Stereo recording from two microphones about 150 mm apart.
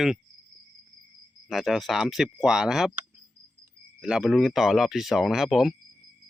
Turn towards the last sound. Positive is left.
turn(degrees=0)  # may be behind; listen again after turning